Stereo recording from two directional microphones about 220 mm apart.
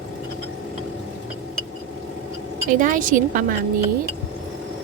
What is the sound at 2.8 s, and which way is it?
Speech, 35° right (ahead or behind).